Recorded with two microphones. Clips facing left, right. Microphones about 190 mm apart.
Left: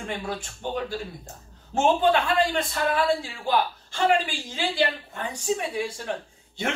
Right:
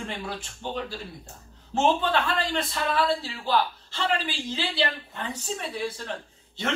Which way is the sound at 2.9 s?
15° left (ahead or behind).